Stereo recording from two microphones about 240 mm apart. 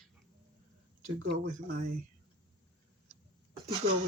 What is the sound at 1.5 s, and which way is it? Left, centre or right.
Speech, right.